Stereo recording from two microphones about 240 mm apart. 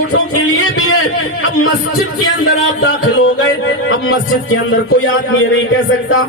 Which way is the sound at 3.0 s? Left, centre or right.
Left.